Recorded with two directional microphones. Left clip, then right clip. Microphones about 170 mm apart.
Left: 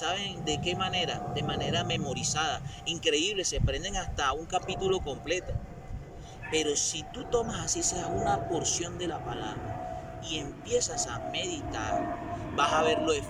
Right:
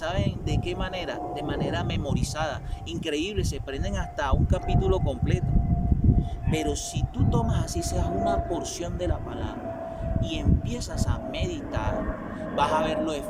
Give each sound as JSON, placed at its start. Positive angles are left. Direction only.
{"t": 0.0, "sound": "speech", "side_deg": -25}
{"t": 6.5, "sound": "speech", "side_deg": -25}
{"t": 10.3, "sound": "speech", "side_deg": -25}